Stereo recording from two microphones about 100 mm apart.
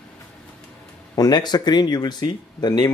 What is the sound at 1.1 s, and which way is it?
Speech, 40° left (ahead or behind).